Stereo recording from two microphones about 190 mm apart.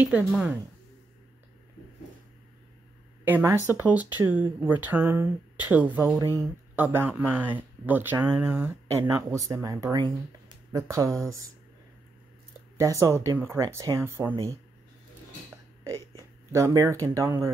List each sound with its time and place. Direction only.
0.0 s speech: 5° right (ahead or behind)
3.3 s speech: 10° right (ahead or behind)
12.7 s speech: 15° right (ahead or behind)
16.5 s speech: 15° right (ahead or behind)